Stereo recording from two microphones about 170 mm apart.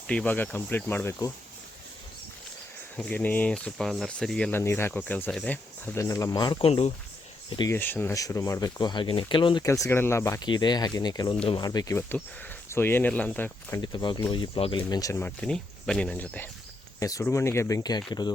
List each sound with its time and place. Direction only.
0.1 s speech: 10° left (ahead or behind)
2.9 s speech: 10° left (ahead or behind); by 6.9 s 35° left (ahead or behind)
7.7 s speech: 10° left (ahead or behind); by 9.6 s 30° left (ahead or behind)
9.6 s speech: 15° left (ahead or behind)
13.8 s speech: 25° left (ahead or behind)